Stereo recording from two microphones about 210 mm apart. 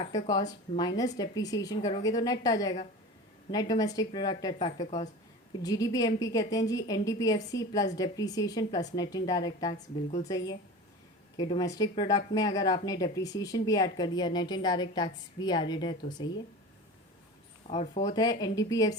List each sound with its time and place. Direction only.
0.3 s speech: 20° left (ahead or behind)
9.7 s speech: 35° left (ahead or behind)
10.2 s speech: 15° left (ahead or behind)
17.7 s speech: 30° left (ahead or behind)
18.0 s speech: 20° left (ahead or behind)